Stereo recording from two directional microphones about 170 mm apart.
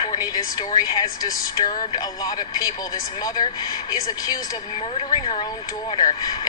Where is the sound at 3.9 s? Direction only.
20° left (ahead or behind).